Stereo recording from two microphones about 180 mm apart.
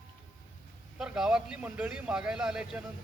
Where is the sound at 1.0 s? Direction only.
5° right (ahead or behind).